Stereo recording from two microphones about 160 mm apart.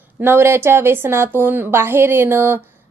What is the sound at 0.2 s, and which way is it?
A woman's voice, 15° right (ahead or behind).